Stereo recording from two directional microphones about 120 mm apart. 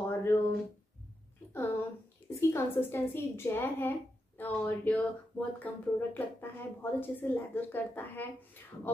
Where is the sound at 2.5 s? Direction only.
20° left (ahead or behind).